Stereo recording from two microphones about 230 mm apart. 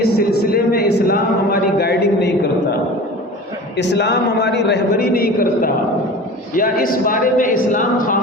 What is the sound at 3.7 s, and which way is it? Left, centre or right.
A man's voice, left.